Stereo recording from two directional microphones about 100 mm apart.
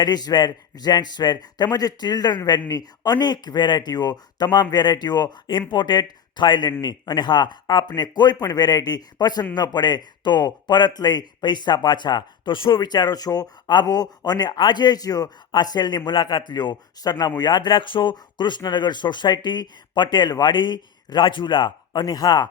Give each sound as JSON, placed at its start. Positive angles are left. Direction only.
{"t": 0.0, "sound": "speech", "side_deg": 45}
{"t": 22.0, "sound": "speech", "side_deg": 40}